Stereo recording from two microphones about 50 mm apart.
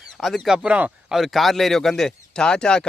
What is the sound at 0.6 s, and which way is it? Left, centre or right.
Speech, right.